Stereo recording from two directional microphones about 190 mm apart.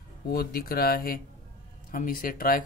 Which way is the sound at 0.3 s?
50° left (ahead or behind).